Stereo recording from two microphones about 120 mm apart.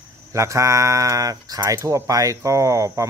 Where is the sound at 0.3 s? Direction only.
25° right (ahead or behind).